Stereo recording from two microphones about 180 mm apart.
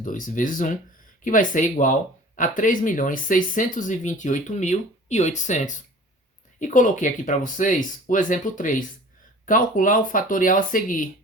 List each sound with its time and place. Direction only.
0.0 s speech: 45° left (ahead or behind)